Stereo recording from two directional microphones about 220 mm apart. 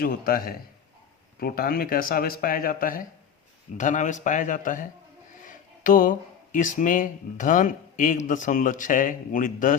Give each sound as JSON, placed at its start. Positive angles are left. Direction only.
{"t": 0.0, "sound": "speech", "side_deg": 40}